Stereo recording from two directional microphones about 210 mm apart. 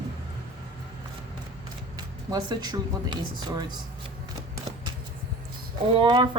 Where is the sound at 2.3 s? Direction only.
20° right (ahead or behind).